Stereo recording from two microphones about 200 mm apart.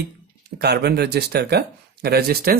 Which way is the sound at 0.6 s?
55° right (ahead or behind).